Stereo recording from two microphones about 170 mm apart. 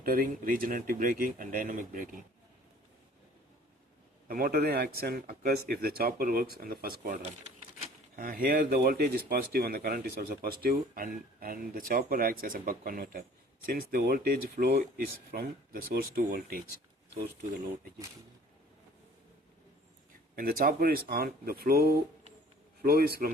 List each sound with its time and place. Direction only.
0.0 s speech: 55° right (ahead or behind)
4.3 s speech: 60° right (ahead or behind)
20.3 s speech: 60° right (ahead or behind)